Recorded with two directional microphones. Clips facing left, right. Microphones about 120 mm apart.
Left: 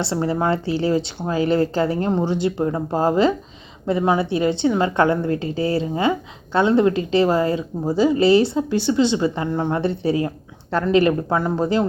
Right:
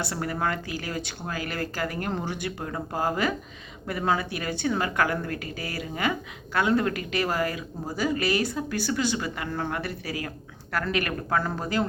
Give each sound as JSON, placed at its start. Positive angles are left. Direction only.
{"t": 0.0, "sound": "speech", "side_deg": 25}